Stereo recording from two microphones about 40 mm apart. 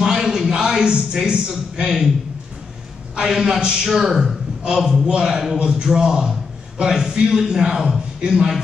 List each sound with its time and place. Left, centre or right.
0.0 s a sound: centre
3.2 s a man's voice: centre
5.6 s a man's voice: right